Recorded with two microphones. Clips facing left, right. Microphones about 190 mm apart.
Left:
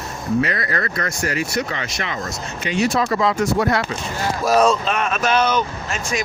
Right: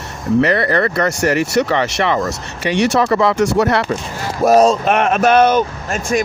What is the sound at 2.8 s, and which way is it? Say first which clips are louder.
Speech: right 4 dB; 70° right (ahead or behind).